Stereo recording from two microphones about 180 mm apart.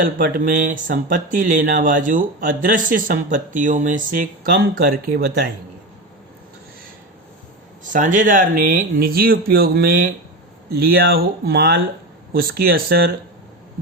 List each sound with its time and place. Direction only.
0.2 s speech: 50° right (ahead or behind)
4.5 s speech: 60° right (ahead or behind)
7.9 s speech: 45° right (ahead or behind)